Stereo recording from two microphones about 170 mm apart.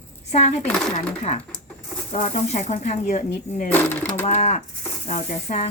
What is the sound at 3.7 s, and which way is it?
Speech, 10° left (ahead or behind).